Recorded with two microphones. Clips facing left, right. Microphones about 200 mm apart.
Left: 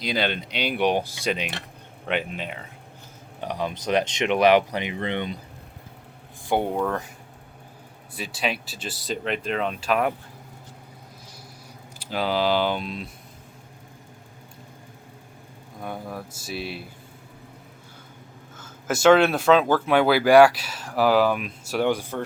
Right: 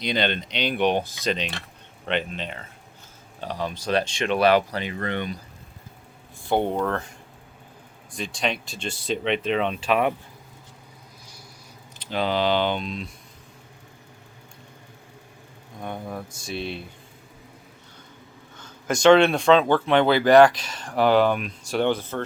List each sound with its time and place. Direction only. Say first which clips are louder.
0.0 s speech: right 1 dB; 5° left (ahead or behind); by 5.4 s 20° left (ahead or behind)
6.5 s speech: right 1 dB; 10° left (ahead or behind)
8.1 s speech: right 1 dB; 5° left (ahead or behind)
11.9 s speech: even; 5° left (ahead or behind)
15.8 s speech: right 1 dB; 5° left (ahead or behind)
18.5 s speech: right 1 dB; 5° left (ahead or behind)